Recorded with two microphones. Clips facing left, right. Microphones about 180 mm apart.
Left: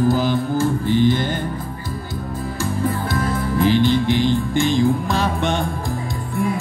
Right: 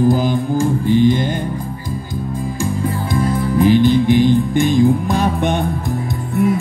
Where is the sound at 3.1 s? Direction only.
15° right (ahead or behind).